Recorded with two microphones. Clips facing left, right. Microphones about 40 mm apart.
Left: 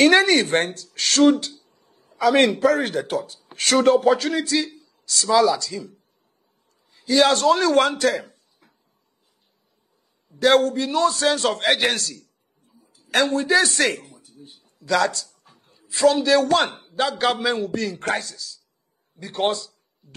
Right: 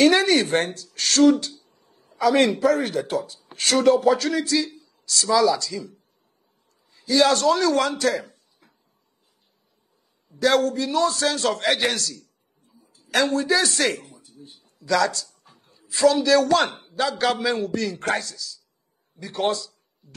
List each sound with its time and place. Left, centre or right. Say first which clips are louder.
0.0 s speech: left 2 dB; left
1.4 s a sound: left 1 dB; left
2.0 s a man's voice: left 1 dB; left
10.4 s a man's voice: left 3 dB; left
13.9 s a sound: even; left
14.8 s a man's voice: left 1 dB; left